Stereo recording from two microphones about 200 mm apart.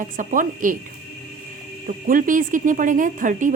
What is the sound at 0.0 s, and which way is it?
A woman's voice, 40° right (ahead or behind).